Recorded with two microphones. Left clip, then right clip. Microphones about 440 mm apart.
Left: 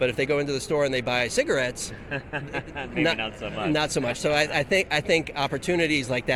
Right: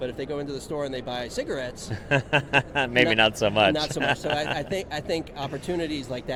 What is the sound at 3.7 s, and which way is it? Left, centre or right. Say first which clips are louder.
A man's voice: even; left.